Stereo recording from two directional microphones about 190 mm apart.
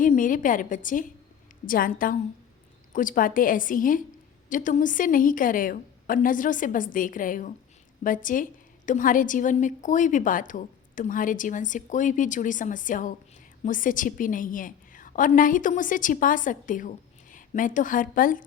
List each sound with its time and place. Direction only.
0.0 s a woman's voice: 45° left (ahead or behind)